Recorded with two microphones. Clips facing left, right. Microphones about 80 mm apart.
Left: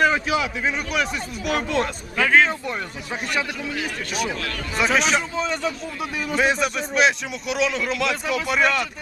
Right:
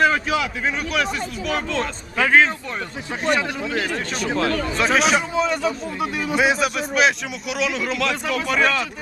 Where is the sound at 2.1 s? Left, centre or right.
Centre.